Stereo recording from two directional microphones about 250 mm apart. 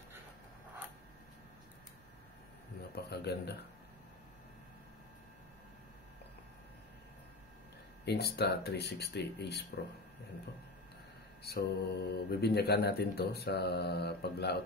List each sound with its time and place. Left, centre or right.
2.9 s speech: left
8.0 s speech: left
11.4 s speech: left